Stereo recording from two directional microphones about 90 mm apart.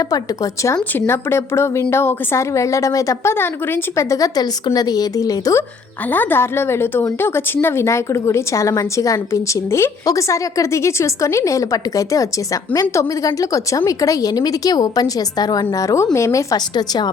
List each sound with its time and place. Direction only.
0.9 s a woman's voice: 25° left (ahead or behind)
3.3 s a woman's voice: 25° left (ahead or behind); by 5.5 s 40° left (ahead or behind)
6.1 s a woman's voice: 25° left (ahead or behind)
16.7 s speech: 50° left (ahead or behind)